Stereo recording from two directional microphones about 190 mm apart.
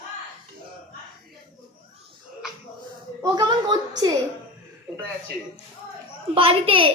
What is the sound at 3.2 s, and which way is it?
Speech, 20° right (ahead or behind).